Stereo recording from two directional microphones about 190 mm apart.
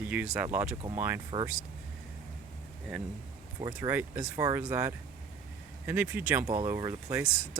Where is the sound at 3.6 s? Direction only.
15° right (ahead or behind).